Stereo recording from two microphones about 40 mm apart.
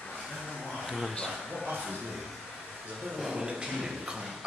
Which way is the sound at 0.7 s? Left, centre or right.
Centre.